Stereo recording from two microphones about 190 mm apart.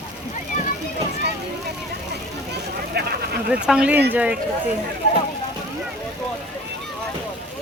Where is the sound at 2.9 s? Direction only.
55° right (ahead or behind).